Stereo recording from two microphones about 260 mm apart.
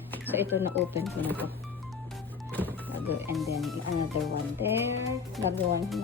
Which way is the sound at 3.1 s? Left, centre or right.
Centre.